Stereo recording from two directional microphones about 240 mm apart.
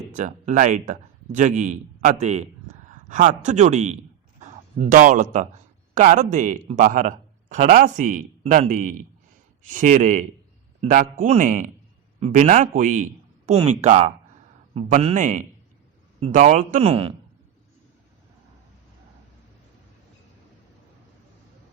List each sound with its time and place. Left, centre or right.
0.1 s a man's voice: right